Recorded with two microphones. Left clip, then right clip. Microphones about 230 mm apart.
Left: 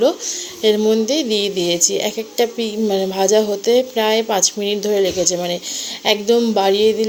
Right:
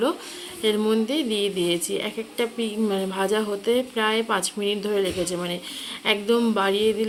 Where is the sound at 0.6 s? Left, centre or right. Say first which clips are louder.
Left 7 dB; centre.